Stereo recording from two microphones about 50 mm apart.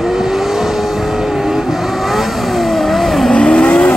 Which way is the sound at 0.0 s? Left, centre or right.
Centre.